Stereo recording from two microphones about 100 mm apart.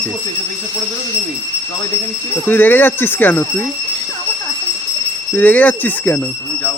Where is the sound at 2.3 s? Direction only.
20° left (ahead or behind).